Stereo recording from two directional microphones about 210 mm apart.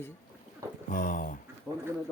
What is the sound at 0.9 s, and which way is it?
Speech, 35° left (ahead or behind).